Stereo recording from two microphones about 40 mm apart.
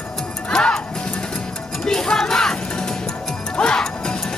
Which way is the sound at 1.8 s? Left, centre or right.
Centre.